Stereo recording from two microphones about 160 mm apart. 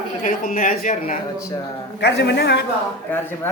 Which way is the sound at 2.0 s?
90° left.